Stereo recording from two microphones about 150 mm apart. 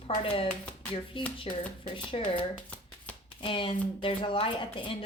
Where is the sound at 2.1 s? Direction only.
40° left (ahead or behind).